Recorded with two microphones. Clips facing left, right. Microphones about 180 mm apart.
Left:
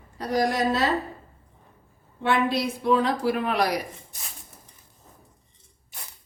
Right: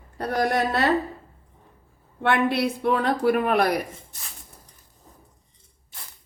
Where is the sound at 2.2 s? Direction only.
60° right (ahead or behind).